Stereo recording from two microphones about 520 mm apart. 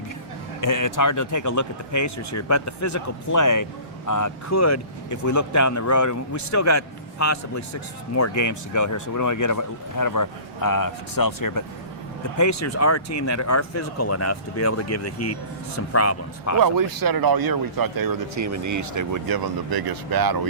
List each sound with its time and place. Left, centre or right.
0.6 s speech: left
16.6 s speech: right